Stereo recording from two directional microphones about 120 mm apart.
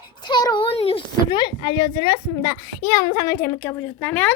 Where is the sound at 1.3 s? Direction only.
40° left (ahead or behind).